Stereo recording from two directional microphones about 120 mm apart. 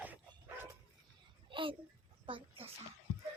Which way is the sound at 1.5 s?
45° right (ahead or behind).